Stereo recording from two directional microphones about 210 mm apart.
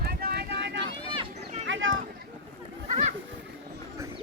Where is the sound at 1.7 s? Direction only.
65° right (ahead or behind).